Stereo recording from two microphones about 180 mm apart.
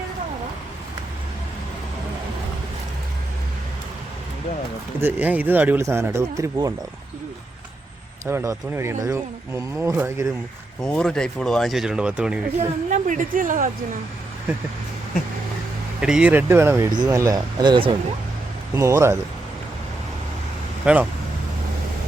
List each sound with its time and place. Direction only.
4.9 s speech: 10° right (ahead or behind)
8.3 s speech: 15° right (ahead or behind)
10.8 s speech: 5° left (ahead or behind)
12.5 s a woman's voice: 40° right (ahead or behind)
16.0 s speech: 5° right (ahead or behind); by 17.9 s 25° right (ahead or behind)
18.7 s speech: 15° right (ahead or behind)
20.8 s speech: 5° right (ahead or behind)